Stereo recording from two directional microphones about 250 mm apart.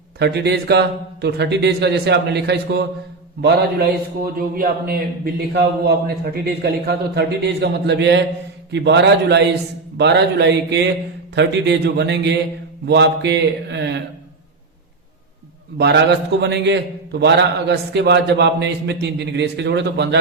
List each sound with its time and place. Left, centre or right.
0.2 s a man's voice: right
15.8 s a man's voice: right